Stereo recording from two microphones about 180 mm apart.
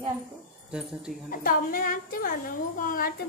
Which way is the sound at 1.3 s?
50° left (ahead or behind).